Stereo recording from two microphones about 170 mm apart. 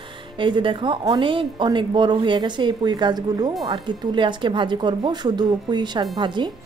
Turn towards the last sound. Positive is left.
turn(degrees=-25)  # may be behind; listen again after turning